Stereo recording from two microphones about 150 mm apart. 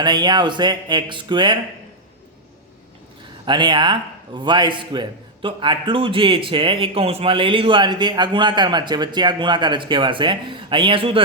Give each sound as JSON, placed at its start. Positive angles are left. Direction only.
{"t": 0.0, "sound": "speech", "side_deg": -30}
{"t": 3.4, "sound": "a man's voice", "side_deg": -30}